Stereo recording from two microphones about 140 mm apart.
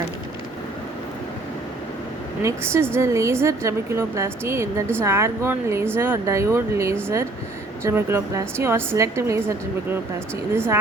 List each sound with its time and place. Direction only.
2.4 s a woman's voice: 20° right (ahead or behind)